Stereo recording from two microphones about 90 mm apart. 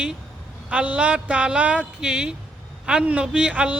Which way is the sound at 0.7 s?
15° right (ahead or behind).